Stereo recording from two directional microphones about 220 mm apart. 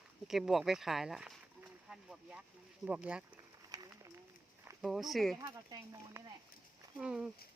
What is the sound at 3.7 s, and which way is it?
Run, 20° right (ahead or behind).